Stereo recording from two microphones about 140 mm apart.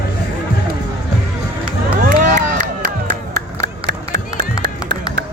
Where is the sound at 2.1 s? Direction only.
70° right (ahead or behind).